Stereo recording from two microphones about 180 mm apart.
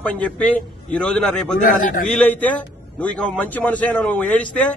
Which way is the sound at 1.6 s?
50° left (ahead or behind).